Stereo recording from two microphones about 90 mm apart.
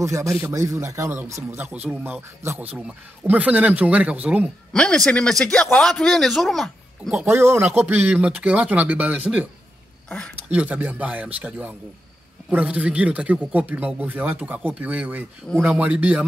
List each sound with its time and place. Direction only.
0.0 s speech: 35° right (ahead or behind); by 2.1 s 15° right (ahead or behind)
2.4 s speech: 30° right (ahead or behind)
3.3 s speech: 15° right (ahead or behind)
4.7 s a man's voice: 10° left (ahead or behind)
7.2 s speech: 30° right (ahead or behind)
7.8 s speech: 15° right (ahead or behind)
10.0 s speech: 15° left (ahead or behind)
10.5 s speech: 15° right (ahead or behind)
15.5 s a man's voice: 5° left (ahead or behind)
15.8 s speech: 15° right (ahead or behind)